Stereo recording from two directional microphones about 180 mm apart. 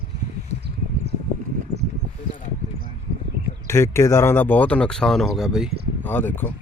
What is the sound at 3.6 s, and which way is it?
Speech, 15° left (ahead or behind).